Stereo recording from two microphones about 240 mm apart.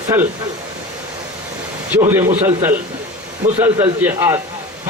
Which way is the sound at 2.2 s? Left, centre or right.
Right.